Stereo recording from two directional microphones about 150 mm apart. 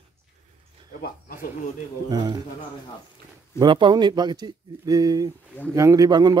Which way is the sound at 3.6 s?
30° right (ahead or behind).